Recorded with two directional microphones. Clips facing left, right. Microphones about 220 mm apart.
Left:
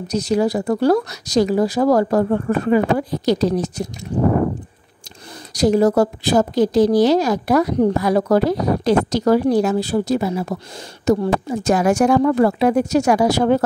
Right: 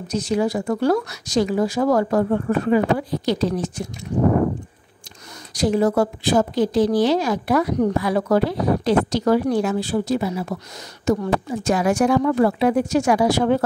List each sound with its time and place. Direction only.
0.1 s speech: 40° left (ahead or behind)
5.5 s a woman's voice: 40° left (ahead or behind)